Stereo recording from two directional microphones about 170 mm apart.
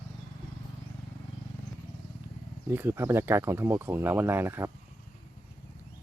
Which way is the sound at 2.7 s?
15° right (ahead or behind).